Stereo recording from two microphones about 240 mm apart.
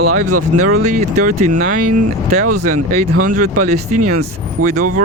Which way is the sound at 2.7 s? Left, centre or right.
Right.